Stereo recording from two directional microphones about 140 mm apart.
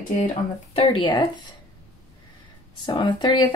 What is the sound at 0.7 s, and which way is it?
Speech, 35° left (ahead or behind).